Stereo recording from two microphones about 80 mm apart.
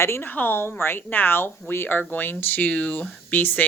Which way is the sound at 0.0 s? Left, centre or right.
Left.